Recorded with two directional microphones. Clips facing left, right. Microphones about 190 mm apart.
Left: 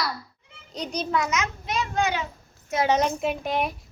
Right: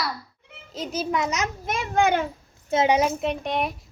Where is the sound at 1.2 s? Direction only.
35° right (ahead or behind).